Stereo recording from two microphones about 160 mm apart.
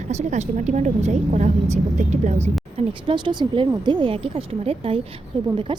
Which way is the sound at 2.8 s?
30° right (ahead or behind).